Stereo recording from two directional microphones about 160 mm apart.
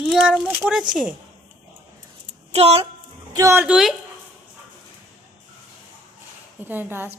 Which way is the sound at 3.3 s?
20° right (ahead or behind).